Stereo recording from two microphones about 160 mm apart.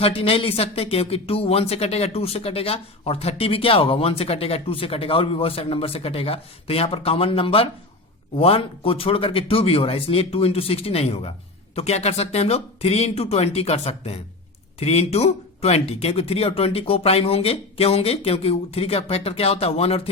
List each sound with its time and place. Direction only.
0.0 s speech: 35° left (ahead or behind)